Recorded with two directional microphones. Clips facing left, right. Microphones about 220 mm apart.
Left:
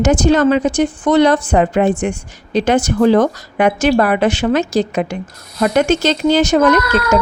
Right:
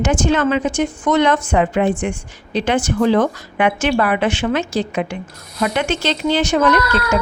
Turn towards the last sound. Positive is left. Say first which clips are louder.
# left 3 dB
turn(degrees=40)  # may be behind; listen again after turning